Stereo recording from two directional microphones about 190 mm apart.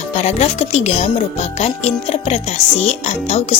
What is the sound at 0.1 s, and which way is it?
Speech, 35° left (ahead or behind).